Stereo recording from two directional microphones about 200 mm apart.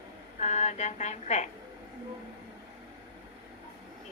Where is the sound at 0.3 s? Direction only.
35° left (ahead or behind).